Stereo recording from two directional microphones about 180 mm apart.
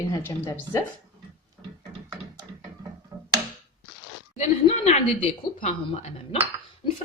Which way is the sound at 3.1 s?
25° right (ahead or behind).